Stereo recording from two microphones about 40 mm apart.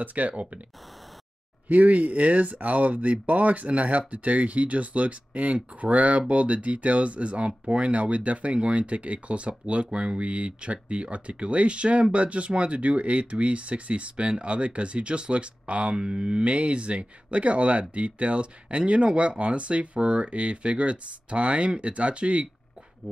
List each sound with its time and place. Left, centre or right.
0.0 s speech: right
1.7 s speech: right
15.9 s speech: centre